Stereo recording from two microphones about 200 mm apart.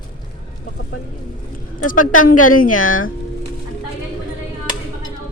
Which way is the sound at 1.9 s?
40° left (ahead or behind).